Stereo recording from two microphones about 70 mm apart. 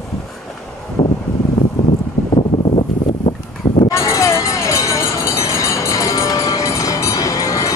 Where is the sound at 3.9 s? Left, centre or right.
Left.